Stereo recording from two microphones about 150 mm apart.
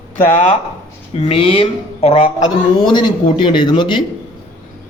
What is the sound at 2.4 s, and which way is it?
Speech, 30° left (ahead or behind).